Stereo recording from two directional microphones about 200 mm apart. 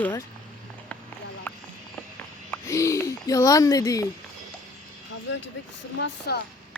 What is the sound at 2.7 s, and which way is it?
Speech, 15° left (ahead or behind).